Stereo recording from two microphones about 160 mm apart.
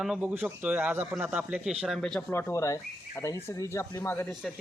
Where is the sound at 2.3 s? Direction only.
15° left (ahead or behind).